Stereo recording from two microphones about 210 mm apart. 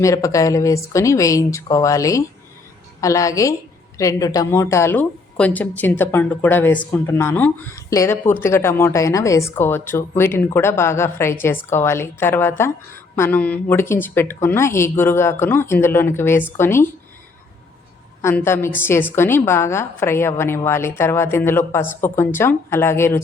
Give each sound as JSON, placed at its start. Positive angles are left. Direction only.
{"t": 0.0, "sound": "speech", "side_deg": 15}
{"t": 18.2, "sound": "speech", "side_deg": 10}